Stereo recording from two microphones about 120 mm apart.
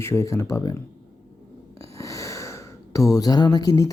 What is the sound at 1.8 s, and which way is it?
Speech, 25° left (ahead or behind).